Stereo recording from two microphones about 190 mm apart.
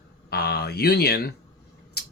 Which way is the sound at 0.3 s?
55° left (ahead or behind).